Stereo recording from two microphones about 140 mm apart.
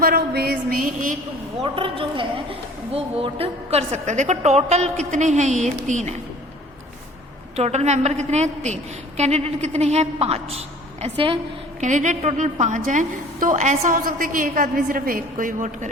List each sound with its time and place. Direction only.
0.0 s a woman's voice: 90° right; by 1.6 s 65° right (ahead or behind)
1.6 s a woman's voice: 40° right (ahead or behind); by 6.1 s 60° right (ahead or behind)
7.5 s a woman's voice: 50° right (ahead or behind)
11.8 s a woman's voice: 60° right (ahead or behind)